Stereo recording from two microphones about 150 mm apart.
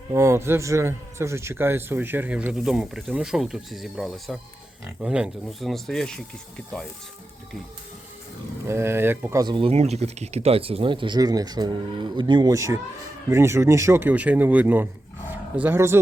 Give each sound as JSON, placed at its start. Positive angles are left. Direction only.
{"t": 0.1, "sound": "a man's voice", "side_deg": -20}
{"t": 8.6, "sound": "a man's voice", "side_deg": -15}
{"t": 9.4, "sound": "a man's voice", "side_deg": -35}